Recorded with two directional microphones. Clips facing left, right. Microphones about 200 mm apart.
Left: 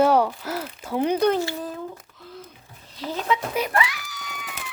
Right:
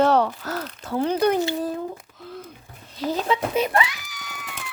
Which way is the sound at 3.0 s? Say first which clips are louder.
Right 2 dB; 35° right (ahead or behind).